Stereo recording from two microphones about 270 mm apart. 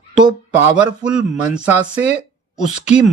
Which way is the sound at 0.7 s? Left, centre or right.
Centre.